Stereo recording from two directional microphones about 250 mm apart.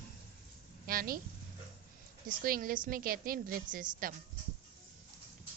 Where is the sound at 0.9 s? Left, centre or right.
Right.